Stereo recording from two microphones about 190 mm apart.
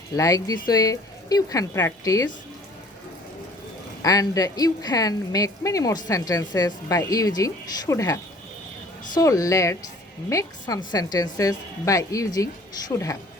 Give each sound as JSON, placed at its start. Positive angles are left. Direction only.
{"t": 0.1, "sound": "speech", "side_deg": 20}
{"t": 4.0, "sound": "a woman's voice", "side_deg": 20}